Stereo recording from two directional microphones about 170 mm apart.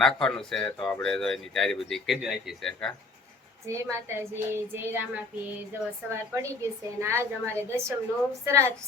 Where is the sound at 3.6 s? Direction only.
15° right (ahead or behind).